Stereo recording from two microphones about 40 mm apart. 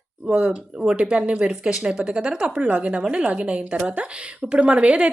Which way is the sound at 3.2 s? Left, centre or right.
Right.